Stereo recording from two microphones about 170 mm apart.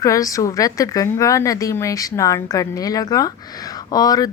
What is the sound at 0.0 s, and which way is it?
A woman's voice, 20° left (ahead or behind).